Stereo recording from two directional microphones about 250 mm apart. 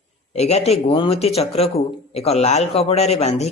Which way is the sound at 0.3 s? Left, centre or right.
Left.